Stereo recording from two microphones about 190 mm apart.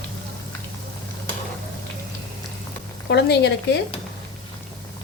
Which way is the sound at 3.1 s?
60° left (ahead or behind).